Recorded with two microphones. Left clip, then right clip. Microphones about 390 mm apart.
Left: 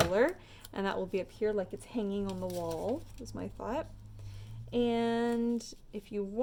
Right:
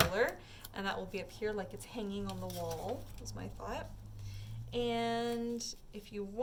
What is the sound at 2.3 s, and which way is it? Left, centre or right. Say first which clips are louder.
Speech: left 5 dB; centre.